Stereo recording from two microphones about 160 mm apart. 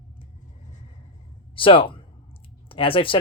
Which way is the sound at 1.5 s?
35° left (ahead or behind).